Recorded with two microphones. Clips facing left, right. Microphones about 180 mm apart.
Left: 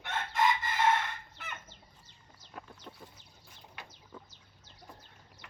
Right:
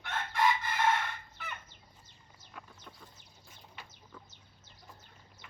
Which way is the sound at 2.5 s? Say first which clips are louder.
Left 3 dB; 40° left (ahead or behind).